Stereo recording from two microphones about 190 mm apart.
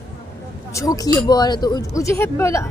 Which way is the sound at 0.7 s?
15° left (ahead or behind).